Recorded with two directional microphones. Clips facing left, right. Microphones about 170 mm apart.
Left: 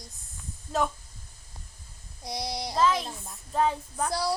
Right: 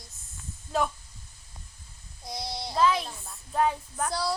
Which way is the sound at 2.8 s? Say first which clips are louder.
Right 1 dB; centre (ahead or behind).